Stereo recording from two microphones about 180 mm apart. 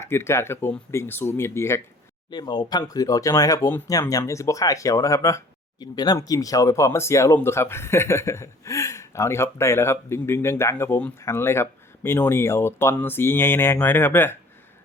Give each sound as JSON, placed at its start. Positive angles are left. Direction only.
{"t": 0.0, "sound": "speech", "side_deg": 15}